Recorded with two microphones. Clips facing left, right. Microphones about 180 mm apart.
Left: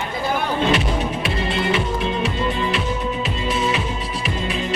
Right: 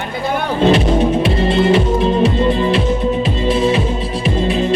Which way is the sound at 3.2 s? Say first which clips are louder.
Right 7 dB; 30° right (ahead or behind).